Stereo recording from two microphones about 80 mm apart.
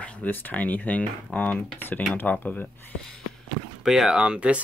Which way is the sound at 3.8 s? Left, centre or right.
Centre.